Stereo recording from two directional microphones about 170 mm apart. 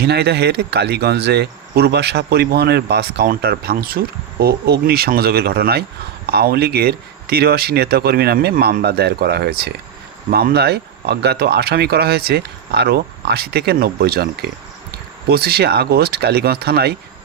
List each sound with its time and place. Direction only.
0.0 s speech: 70° right (ahead or behind)